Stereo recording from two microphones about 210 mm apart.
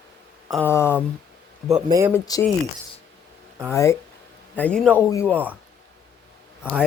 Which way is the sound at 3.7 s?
15° left (ahead or behind).